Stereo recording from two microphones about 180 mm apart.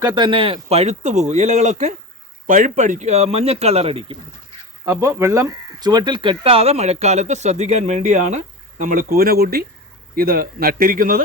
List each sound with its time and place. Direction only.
0.0 s speech: 25° right (ahead or behind)
4.9 s speech: 15° right (ahead or behind); by 11.2 s 50° right (ahead or behind)